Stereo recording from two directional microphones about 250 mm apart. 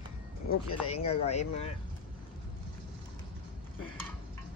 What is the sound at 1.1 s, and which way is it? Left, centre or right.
Speech, left.